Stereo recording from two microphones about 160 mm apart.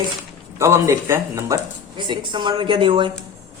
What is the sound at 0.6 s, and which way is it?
Speech, 15° right (ahead or behind).